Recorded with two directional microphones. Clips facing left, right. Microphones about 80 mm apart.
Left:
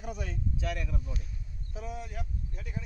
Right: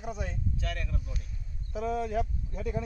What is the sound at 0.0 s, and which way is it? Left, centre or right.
Speech, right.